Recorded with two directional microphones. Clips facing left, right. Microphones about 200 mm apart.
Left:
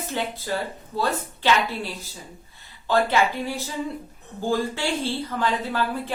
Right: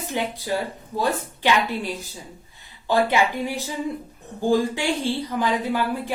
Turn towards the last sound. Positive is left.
turn(degrees=-15)  # may be behind; listen again after turning